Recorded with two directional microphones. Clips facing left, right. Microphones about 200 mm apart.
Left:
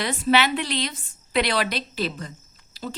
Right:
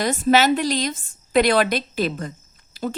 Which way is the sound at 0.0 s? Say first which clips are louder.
Right 4 dB; 45° right (ahead or behind).